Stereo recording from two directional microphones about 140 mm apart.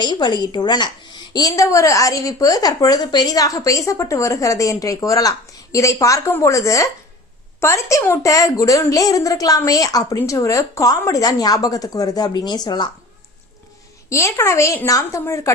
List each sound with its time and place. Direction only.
0.0 s a woman's voice: 30° left (ahead or behind)
14.1 s a woman's voice: 20° left (ahead or behind)